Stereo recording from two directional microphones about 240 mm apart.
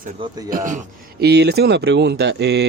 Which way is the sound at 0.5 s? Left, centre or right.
Right.